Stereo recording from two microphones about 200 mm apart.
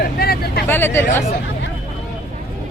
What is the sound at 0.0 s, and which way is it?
Vehicle, 50° left (ahead or behind).